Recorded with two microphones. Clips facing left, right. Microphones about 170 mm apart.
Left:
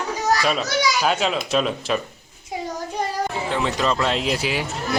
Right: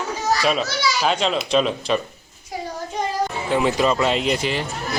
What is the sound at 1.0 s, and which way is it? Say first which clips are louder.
Speech: right 1 dB; 5° left (ahead or behind).